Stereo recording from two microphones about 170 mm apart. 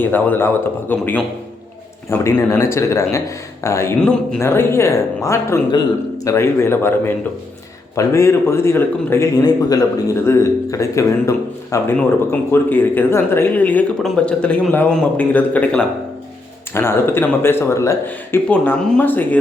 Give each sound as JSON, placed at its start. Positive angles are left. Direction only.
{"t": 0.0, "sound": "a man's voice", "side_deg": 10}
{"t": 4.0, "sound": "speech", "side_deg": 5}
{"t": 4.4, "sound": "a man's voice", "side_deg": 15}